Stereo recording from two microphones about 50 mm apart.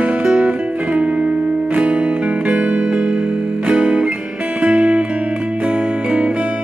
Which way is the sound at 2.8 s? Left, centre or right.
Centre.